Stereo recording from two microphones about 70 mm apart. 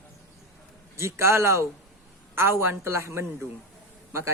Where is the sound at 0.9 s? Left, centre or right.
Right.